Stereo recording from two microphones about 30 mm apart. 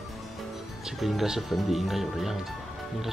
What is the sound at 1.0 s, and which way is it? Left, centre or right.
Speech, centre.